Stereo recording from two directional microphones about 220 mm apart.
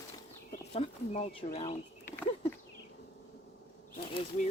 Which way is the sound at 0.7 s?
30° left (ahead or behind).